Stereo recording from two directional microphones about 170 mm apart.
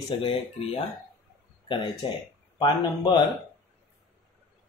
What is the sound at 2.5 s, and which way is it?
Speech, 25° left (ahead or behind).